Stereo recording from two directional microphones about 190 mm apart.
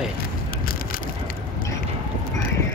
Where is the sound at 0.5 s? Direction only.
50° left (ahead or behind).